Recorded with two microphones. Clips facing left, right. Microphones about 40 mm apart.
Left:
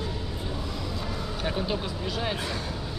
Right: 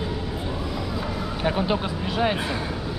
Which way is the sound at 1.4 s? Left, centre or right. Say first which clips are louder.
Right 6 dB; right.